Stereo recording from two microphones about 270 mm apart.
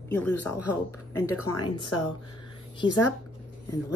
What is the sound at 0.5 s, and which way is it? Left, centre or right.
Speech, left.